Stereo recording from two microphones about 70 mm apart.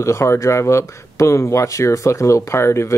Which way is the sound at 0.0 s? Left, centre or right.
Left.